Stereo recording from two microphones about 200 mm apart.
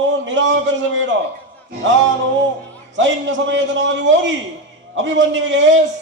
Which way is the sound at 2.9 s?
65° right (ahead or behind).